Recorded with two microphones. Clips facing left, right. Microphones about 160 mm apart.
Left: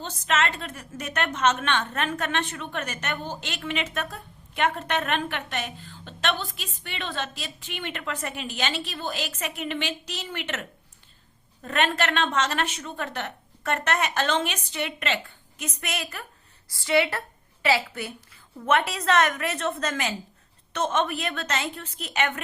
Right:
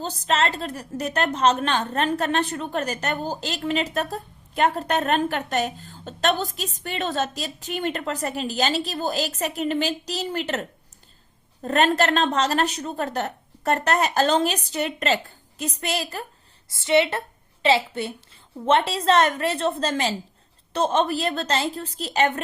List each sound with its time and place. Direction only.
0.0 s a woman's voice: 35° right (ahead or behind)